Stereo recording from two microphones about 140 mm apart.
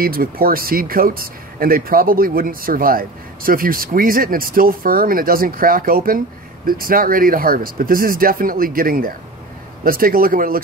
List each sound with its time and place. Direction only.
0.0 s speech: 90° right